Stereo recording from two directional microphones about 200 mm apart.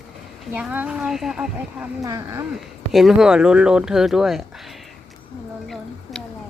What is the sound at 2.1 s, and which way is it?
Speech, 15° right (ahead or behind).